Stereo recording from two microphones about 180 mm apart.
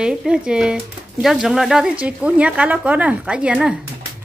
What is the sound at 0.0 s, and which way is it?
Speech, 5° right (ahead or behind).